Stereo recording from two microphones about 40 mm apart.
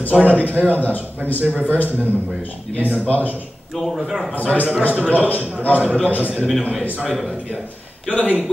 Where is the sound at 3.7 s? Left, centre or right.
Centre.